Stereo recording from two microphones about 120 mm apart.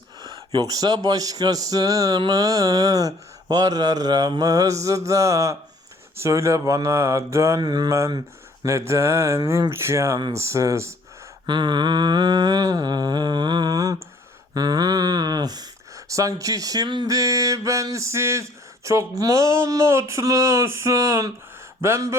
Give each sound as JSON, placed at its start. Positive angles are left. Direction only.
{"t": 0.2, "sound": "a sound", "side_deg": -35}
{"t": 0.7, "sound": "speech", "side_deg": -35}
{"t": 7.6, "sound": "speech", "side_deg": -35}
{"t": 11.4, "sound": "speech", "side_deg": -40}